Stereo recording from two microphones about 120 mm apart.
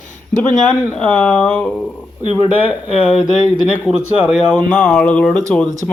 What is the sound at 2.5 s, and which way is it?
Speech, 15° right (ahead or behind).